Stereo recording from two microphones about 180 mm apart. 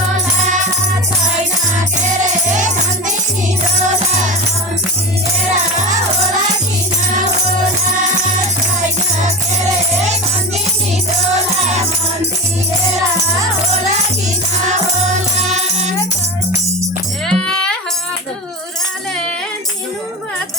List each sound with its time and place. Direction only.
3.8 s music: 45° right (ahead or behind)
15.4 s music: 40° right (ahead or behind)
17.2 s music: 5° left (ahead or behind)